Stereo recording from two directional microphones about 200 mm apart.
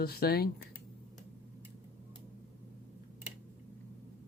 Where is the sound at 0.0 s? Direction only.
50° left (ahead or behind).